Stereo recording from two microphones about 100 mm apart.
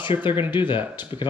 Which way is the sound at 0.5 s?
55° left (ahead or behind).